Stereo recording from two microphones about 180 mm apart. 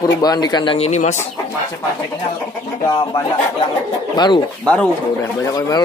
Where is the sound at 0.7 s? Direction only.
35° left (ahead or behind).